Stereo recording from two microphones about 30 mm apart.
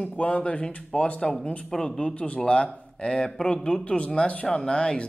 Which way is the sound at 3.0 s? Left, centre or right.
Left.